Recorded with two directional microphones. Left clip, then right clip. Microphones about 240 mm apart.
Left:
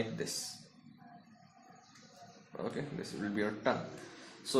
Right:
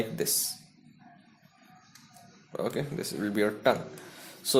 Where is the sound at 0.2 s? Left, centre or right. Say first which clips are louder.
Right 9 dB; right.